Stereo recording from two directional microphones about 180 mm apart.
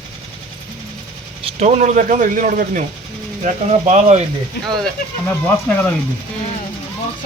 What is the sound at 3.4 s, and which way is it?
Speech, 40° right (ahead or behind).